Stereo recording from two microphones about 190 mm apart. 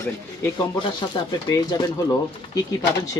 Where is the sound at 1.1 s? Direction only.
25° left (ahead or behind).